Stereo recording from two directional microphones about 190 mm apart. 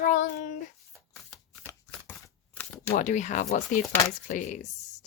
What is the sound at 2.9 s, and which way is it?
Speech, 40° left (ahead or behind).